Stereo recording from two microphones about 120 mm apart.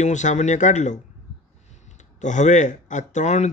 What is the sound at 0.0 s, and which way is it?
Speech, 85° left.